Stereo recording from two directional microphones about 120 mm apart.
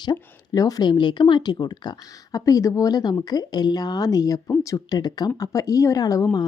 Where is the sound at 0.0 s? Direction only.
35° left (ahead or behind).